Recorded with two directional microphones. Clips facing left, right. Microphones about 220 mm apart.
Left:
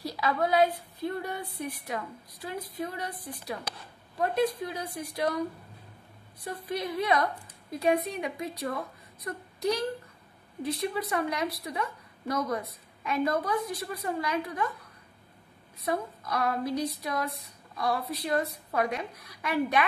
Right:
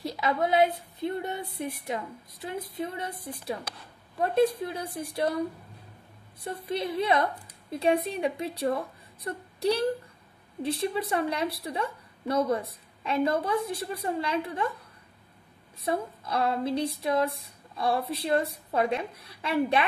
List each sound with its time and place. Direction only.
0.0 s a woman's voice: 25° right (ahead or behind)
6.4 s a woman's voice: 25° right (ahead or behind)
15.8 s a woman's voice: 30° right (ahead or behind)